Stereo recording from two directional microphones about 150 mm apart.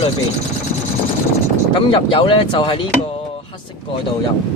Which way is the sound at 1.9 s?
35° left (ahead or behind).